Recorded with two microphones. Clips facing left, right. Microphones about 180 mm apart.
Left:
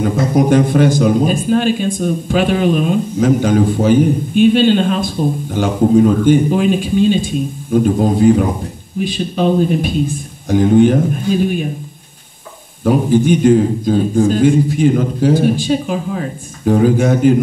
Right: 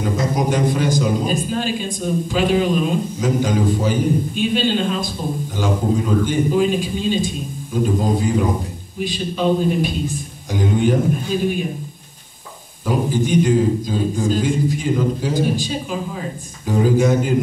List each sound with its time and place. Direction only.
0.0 s a man's voice: 55° left (ahead or behind)
12.8 s a man's voice: 55° left (ahead or behind)